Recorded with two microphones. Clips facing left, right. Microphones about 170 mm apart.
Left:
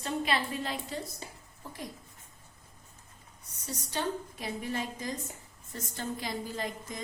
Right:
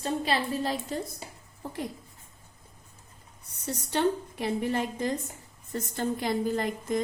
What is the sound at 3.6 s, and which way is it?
A woman's voice, 60° right (ahead or behind).